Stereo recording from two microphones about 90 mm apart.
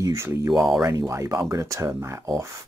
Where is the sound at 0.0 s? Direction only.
35° right (ahead or behind).